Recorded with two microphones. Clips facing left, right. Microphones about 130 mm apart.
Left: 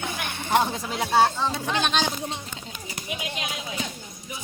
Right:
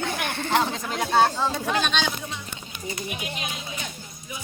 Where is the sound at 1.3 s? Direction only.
5° right (ahead or behind).